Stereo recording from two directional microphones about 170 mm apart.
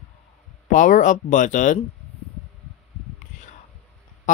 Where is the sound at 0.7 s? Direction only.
50° left (ahead or behind).